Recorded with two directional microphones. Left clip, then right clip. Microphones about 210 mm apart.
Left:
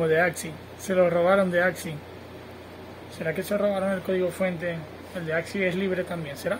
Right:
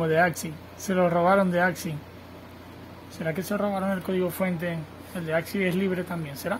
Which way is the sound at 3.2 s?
40° right (ahead or behind).